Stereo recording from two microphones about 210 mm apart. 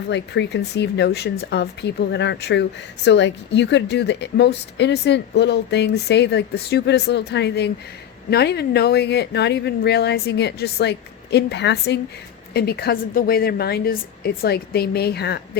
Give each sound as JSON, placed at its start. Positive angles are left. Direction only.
{"t": 0.1, "sound": "speech", "side_deg": 55}